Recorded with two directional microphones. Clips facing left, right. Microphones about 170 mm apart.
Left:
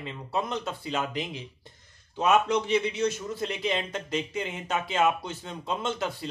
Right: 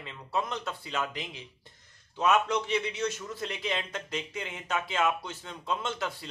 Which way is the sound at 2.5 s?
25° left (ahead or behind).